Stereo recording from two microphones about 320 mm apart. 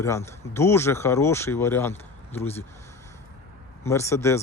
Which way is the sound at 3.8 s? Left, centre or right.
Centre.